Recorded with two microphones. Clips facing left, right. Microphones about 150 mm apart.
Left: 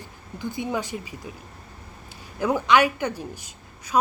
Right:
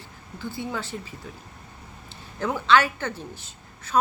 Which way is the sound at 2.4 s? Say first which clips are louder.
Left 2 dB; 15° left (ahead or behind).